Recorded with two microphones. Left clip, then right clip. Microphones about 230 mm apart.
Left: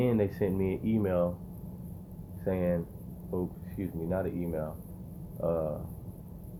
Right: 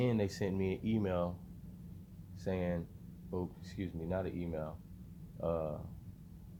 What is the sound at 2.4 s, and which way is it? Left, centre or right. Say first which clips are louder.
Speech: left 7 dB; right.